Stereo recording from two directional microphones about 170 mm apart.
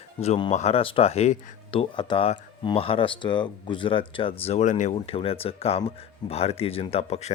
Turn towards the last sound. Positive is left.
turn(degrees=35)  # may be behind; listen again after turning